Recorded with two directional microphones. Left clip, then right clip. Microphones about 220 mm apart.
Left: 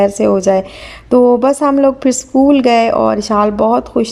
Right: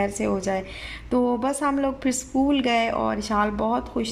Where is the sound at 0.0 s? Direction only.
25° left (ahead or behind).